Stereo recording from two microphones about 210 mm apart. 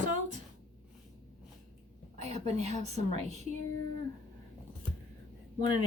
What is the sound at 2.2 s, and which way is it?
Speech, 30° right (ahead or behind).